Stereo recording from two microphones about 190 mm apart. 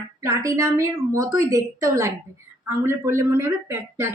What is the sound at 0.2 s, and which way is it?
A woman's voice, 15° right (ahead or behind).